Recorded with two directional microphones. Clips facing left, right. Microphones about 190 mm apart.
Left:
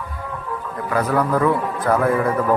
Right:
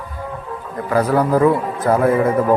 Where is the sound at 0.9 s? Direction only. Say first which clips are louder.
Right 4 dB; 30° right (ahead or behind).